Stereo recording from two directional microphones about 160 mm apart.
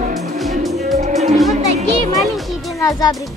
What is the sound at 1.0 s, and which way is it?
Music, 45° right (ahead or behind).